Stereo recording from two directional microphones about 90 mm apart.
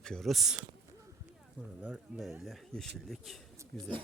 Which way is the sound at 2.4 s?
Centre (ahead or behind).